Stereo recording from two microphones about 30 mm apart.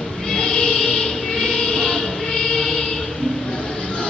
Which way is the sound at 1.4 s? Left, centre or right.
Centre.